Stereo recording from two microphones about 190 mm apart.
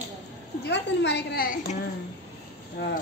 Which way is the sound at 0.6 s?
65° left (ahead or behind).